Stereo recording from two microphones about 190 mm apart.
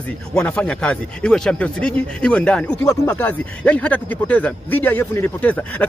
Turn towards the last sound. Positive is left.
turn(degrees=10)  # may be behind; listen again after turning